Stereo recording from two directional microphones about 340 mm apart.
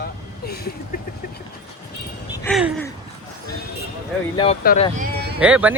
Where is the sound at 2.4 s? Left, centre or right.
Centre.